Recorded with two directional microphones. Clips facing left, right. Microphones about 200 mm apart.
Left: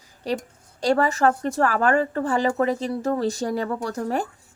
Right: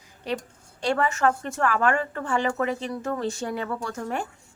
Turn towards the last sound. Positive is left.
turn(degrees=35)  # may be behind; listen again after turning